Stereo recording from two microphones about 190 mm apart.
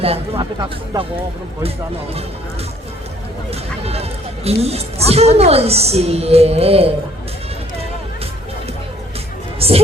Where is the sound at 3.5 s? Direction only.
30° right (ahead or behind).